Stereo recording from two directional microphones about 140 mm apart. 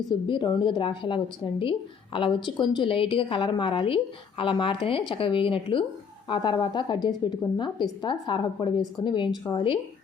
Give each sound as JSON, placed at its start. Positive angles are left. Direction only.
{"t": 0.1, "sound": "a woman's voice", "side_deg": 35}